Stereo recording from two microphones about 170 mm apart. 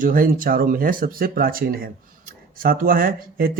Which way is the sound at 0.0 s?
55° right (ahead or behind).